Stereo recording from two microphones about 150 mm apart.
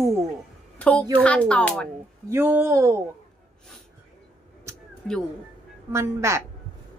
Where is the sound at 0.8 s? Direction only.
10° left (ahead or behind).